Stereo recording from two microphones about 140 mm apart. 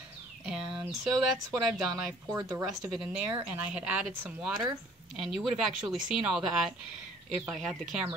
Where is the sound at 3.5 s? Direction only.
10° right (ahead or behind).